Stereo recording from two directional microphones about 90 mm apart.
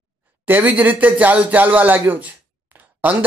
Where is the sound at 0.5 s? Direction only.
20° right (ahead or behind).